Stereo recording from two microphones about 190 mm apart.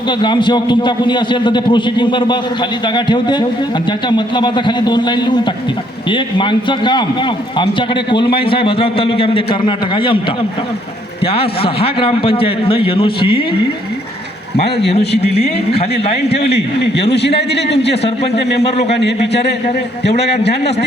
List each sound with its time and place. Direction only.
0.2 s a man's voice: 25° left (ahead or behind)
11.3 s a man's voice: 30° left (ahead or behind)
15.2 s speech: 35° left (ahead or behind)
16.5 s a man's voice: 60° left (ahead or behind)